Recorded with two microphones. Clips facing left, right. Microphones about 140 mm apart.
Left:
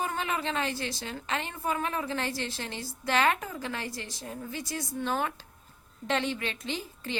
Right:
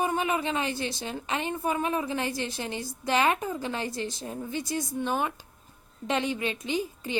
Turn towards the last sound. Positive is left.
turn(degrees=-15)  # may be behind; listen again after turning